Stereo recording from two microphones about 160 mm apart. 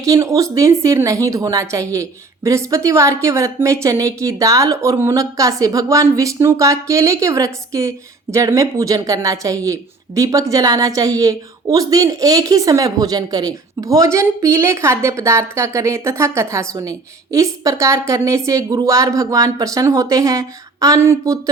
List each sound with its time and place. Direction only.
0.0 s a woman's voice: 20° right (ahead or behind)